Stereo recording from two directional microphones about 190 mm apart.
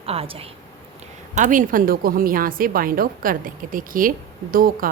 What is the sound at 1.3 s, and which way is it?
A woman's voice, 40° right (ahead or behind).